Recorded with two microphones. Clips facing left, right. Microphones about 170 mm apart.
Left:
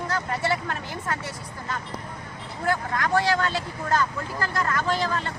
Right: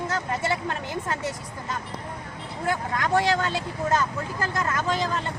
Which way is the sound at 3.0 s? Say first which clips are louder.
Right 2 dB; 20° right (ahead or behind).